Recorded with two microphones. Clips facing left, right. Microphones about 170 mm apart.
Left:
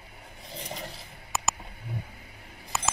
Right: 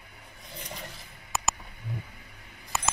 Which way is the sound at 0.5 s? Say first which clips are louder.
Left 3 dB; 30° left (ahead or behind).